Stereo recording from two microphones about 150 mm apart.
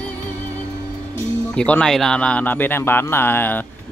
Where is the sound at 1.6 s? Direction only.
5° left (ahead or behind).